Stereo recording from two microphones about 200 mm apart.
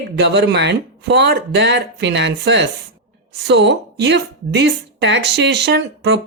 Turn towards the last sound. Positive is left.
turn(degrees=-55)  # may be behind; listen again after turning